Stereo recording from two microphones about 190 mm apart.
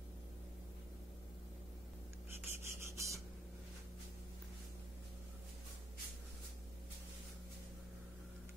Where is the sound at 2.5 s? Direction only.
15° right (ahead or behind).